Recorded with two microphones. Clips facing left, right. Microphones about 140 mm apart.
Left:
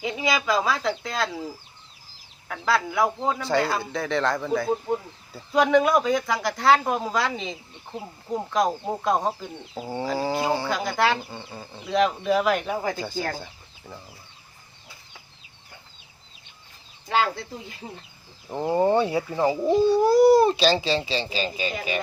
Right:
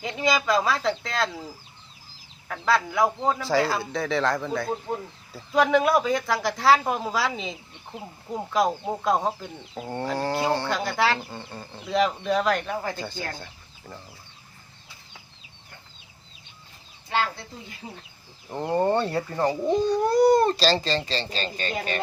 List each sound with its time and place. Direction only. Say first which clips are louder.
0.0 s speech: right 1 dB; 5° left (ahead or behind)
2.5 s speech: even; centre (ahead or behind)
13.3 s chicken: left 4 dB; 5° left (ahead or behind)
18.5 s speech: left 2 dB; 5° left (ahead or behind)